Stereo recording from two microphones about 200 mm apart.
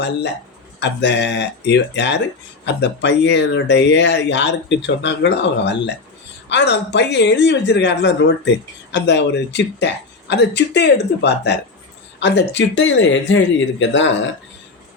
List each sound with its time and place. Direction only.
0.8 s speech: 60° left (ahead or behind)